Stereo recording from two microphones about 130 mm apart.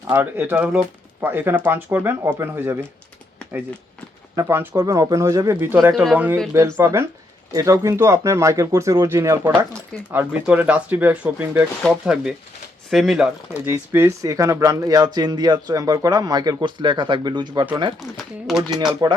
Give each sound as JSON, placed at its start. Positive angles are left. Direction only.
{"t": 0.1, "sound": "speech", "side_deg": -15}
{"t": 4.4, "sound": "speech", "side_deg": -20}
{"t": 5.9, "sound": "speech", "side_deg": 0}
{"t": 6.5, "sound": "speech", "side_deg": -20}
{"t": 13.5, "sound": "speech", "side_deg": -15}
{"t": 18.2, "sound": "speech", "side_deg": 0}